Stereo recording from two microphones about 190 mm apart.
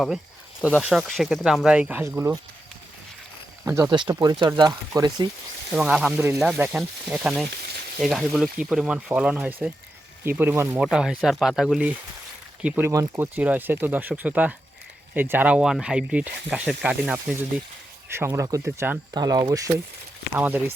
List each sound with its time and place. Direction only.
0.8 s speech: centre (ahead or behind)
3.7 s speech: 15° right (ahead or behind)
5.7 s speech: 5° right (ahead or behind)